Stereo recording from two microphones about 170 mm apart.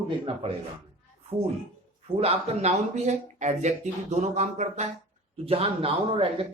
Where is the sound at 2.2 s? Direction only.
35° right (ahead or behind).